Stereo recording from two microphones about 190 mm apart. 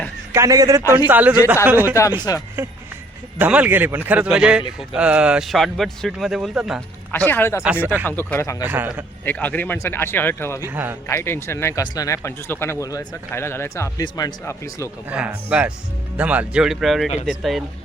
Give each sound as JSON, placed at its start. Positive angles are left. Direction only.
{"t": 0.3, "sound": "a man's voice", "side_deg": -20}
{"t": 2.3, "sound": "speech", "side_deg": 20}
{"t": 3.3, "sound": "a man's voice", "side_deg": -10}
{"t": 7.1, "sound": "a man's voice", "side_deg": 10}
{"t": 7.6, "sound": "a man's voice", "side_deg": -5}
{"t": 8.0, "sound": "a man's voice", "side_deg": 10}
{"t": 8.6, "sound": "a man's voice", "side_deg": -10}
{"t": 9.2, "sound": "a man's voice", "side_deg": 10}
{"t": 10.7, "sound": "a man's voice", "side_deg": -10}
{"t": 11.1, "sound": "a man's voice", "side_deg": 15}
{"t": 15.1, "sound": "a man's voice", "side_deg": -5}